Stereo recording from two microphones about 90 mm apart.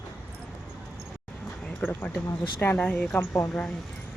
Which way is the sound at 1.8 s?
20° left (ahead or behind).